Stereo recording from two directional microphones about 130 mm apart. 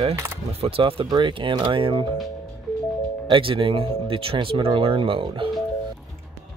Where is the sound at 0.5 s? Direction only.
50° right (ahead or behind).